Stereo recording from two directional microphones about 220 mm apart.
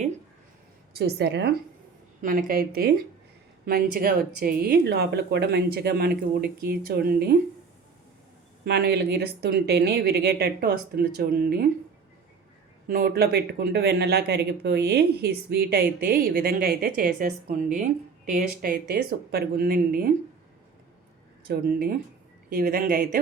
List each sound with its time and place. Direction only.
0.9 s speech: 50° right (ahead or behind)
2.2 s speech: 40° right (ahead or behind)
8.6 s speech: 45° right (ahead or behind)
12.9 s speech: 45° right (ahead or behind)
21.4 s speech: 45° right (ahead or behind)